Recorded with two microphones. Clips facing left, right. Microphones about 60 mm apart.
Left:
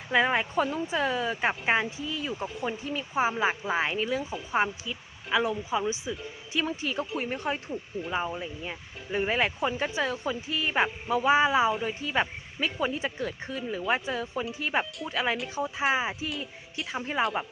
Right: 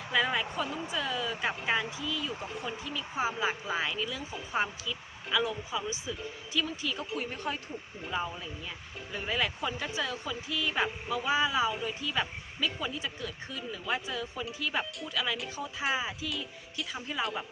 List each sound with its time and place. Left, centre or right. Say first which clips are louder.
0.1 s speech: left 5 dB; left